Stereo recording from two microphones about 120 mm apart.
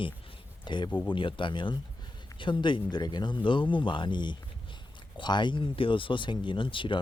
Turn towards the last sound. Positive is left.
turn(degrees=45)  # may be behind; listen again after turning